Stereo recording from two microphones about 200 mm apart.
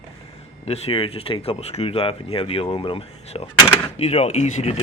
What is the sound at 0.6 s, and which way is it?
Speech, 30° left (ahead or behind).